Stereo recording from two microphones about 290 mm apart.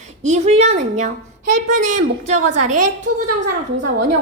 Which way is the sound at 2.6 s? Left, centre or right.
Right.